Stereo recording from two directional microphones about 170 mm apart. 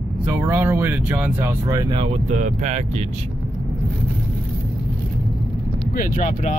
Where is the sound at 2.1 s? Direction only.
45° right (ahead or behind).